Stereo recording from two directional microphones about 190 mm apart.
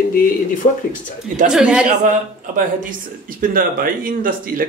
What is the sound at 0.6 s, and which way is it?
Speech, 35° left (ahead or behind).